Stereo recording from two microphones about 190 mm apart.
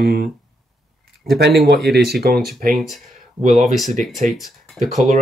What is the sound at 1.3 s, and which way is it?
Speech, 60° right (ahead or behind).